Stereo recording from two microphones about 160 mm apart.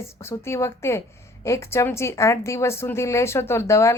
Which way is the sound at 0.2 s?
15° left (ahead or behind).